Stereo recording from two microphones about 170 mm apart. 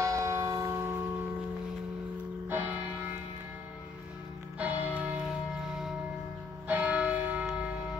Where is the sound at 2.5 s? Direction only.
10° right (ahead or behind).